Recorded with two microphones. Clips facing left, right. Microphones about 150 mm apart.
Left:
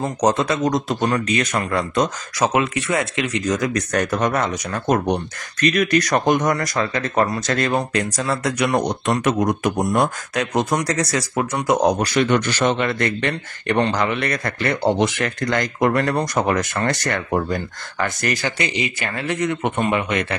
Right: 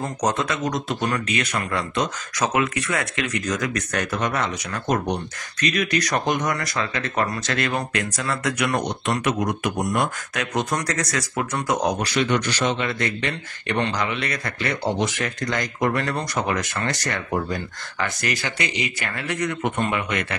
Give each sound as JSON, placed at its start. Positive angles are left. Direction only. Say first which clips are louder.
{"t": 0.0, "sound": "speech", "louder": "left 5 dB", "side_deg": 30}
{"t": 2.3, "sound": "speech", "louder": "left 3 dB", "side_deg": 30}
{"t": 9.0, "sound": "speech", "louder": "left 4 dB", "side_deg": 45}
{"t": 12.0, "sound": "speech", "louder": "left 4 dB", "side_deg": 45}
{"t": 18.6, "sound": "speech", "louder": "left 3 dB", "side_deg": 30}